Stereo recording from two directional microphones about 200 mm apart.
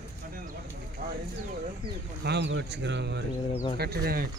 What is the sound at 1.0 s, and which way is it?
Speech, 50° right (ahead or behind).